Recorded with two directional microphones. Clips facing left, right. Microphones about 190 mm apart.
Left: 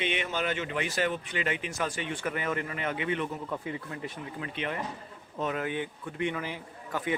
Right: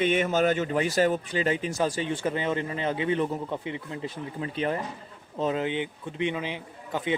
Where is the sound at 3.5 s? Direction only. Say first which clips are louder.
Right 2 dB; 20° right (ahead or behind).